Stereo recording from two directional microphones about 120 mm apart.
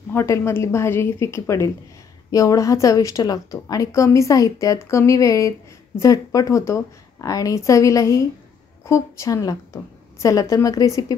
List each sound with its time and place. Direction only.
0.1 s a woman's voice: 20° left (ahead or behind)